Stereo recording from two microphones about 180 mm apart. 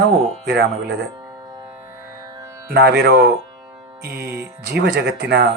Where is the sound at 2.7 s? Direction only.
65° right (ahead or behind).